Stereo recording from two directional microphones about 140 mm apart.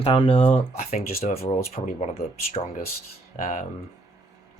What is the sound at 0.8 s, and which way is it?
Speech, 60° left (ahead or behind).